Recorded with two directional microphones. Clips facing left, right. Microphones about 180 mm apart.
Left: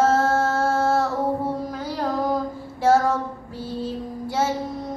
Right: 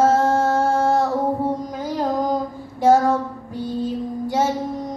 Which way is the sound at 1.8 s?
15° right (ahead or behind).